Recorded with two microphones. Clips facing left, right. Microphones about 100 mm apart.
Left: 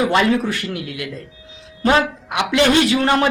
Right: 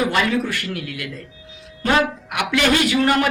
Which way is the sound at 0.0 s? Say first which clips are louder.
Left 3 dB; 25° left (ahead or behind).